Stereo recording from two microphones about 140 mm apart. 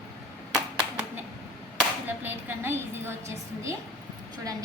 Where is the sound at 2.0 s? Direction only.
15° right (ahead or behind).